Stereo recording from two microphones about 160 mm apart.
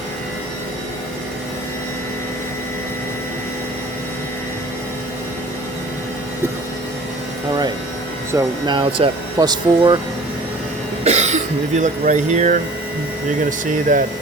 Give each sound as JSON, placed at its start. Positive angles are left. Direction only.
{"t": 8.3, "sound": "speech", "side_deg": -25}
{"t": 11.0, "sound": "speech", "side_deg": -45}